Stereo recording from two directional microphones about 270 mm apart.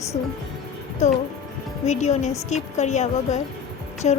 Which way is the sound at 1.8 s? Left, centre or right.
Left.